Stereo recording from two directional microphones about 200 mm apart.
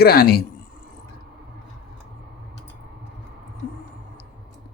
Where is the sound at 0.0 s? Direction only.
50° left (ahead or behind).